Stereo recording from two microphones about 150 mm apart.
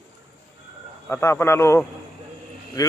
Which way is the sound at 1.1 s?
15° left (ahead or behind).